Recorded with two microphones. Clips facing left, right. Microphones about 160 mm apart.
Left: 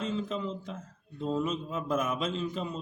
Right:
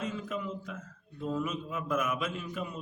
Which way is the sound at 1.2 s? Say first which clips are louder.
Left 3 dB; 25° left (ahead or behind).